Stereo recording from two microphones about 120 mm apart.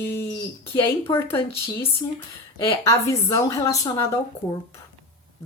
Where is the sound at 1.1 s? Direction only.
45° left (ahead or behind).